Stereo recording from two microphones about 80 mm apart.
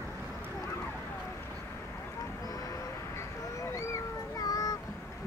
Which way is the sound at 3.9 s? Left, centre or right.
Left.